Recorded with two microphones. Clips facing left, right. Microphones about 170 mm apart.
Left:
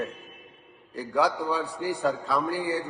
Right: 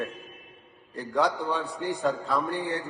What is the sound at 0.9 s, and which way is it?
A man's voice, 5° left (ahead or behind).